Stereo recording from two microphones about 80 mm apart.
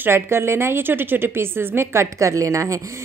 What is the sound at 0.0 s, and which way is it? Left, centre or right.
Speech, right.